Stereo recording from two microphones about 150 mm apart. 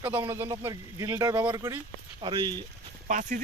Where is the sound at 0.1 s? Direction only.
15° right (ahead or behind).